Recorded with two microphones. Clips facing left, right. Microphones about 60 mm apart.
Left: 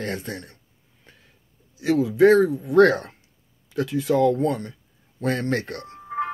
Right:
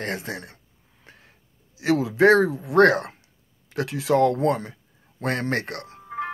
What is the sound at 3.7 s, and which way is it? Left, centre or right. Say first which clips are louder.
Speech: even; right.